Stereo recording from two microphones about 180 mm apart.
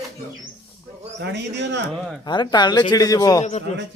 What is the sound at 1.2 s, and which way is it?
Speech, 75° right (ahead or behind).